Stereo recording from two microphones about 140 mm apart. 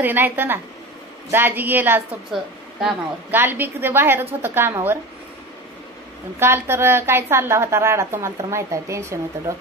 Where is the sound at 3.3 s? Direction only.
15° right (ahead or behind).